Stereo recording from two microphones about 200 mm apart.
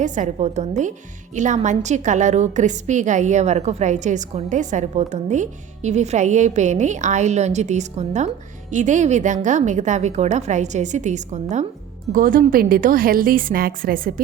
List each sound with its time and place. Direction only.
0.0 s a woman's voice: 40° right (ahead or behind)